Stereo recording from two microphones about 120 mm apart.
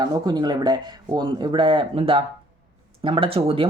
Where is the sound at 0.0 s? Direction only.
35° right (ahead or behind).